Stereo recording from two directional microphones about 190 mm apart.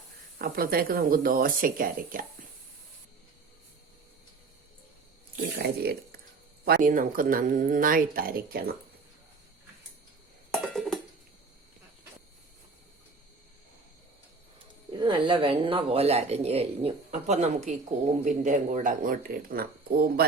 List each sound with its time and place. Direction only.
0.3 s speech: 50° right (ahead or behind)
5.8 s speech: 55° right (ahead or behind)
10.5 s a sound: centre (ahead or behind)
14.9 s speech: 25° right (ahead or behind); by 20.2 s 50° right (ahead or behind)